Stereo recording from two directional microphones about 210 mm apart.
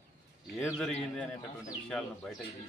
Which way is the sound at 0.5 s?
Centre (ahead or behind).